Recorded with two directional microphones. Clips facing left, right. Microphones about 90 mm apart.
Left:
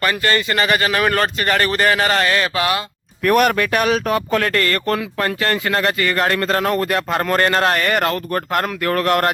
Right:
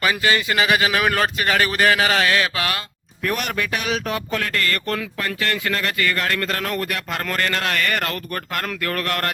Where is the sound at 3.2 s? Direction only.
55° left (ahead or behind).